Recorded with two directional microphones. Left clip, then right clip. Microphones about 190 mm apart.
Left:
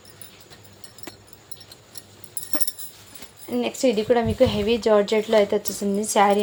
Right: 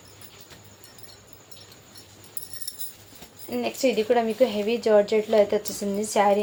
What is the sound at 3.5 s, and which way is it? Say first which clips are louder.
Speech: left 2 dB; 35° left (ahead or behind).